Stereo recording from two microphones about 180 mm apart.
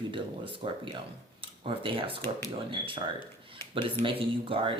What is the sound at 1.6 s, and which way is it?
Speech, 30° right (ahead or behind).